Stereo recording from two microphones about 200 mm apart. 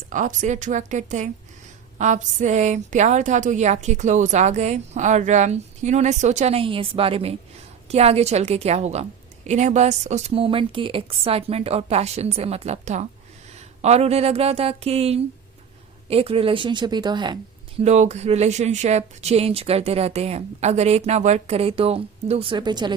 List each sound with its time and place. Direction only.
0.1 s a woman's voice: 40° right (ahead or behind); by 17.3 s 20° right (ahead or behind)
17.7 s a woman's voice: 35° right (ahead or behind)